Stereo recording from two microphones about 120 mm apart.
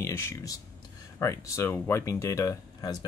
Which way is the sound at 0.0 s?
25° left (ahead or behind).